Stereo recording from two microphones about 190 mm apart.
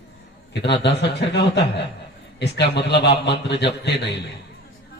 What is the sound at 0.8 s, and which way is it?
A man's voice, 65° left (ahead or behind).